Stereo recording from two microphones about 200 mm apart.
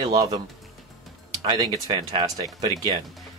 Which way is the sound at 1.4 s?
20° right (ahead or behind).